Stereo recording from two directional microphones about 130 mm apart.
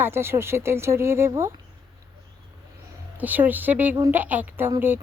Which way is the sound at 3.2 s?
15° right (ahead or behind).